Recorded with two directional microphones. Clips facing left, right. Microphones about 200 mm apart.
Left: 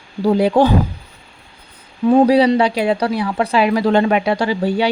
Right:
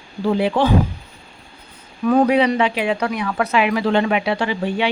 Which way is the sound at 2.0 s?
25° left (ahead or behind).